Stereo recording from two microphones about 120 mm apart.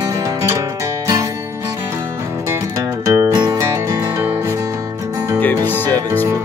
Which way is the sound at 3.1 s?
25° right (ahead or behind).